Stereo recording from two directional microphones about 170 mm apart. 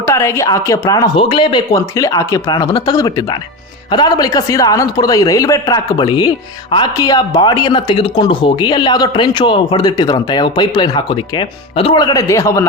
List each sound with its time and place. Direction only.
0.0 s a woman's voice: 15° left (ahead or behind)